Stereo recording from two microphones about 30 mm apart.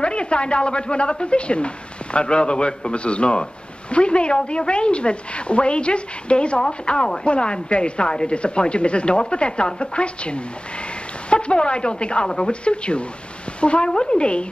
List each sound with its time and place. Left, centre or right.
0.0 s a woman's voice: left
6.9 s a woman's voice: left